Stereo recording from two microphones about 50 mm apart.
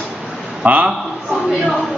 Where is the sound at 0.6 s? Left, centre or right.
Right.